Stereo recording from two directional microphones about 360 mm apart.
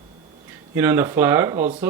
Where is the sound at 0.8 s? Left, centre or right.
Centre.